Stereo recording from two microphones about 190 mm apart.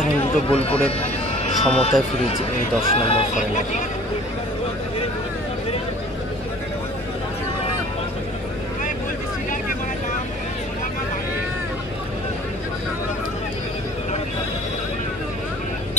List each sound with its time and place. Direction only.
0.5 s speech: 30° left (ahead or behind)
1.4 s music: 30° left (ahead or behind)
2.8 s speech: 30° left (ahead or behind)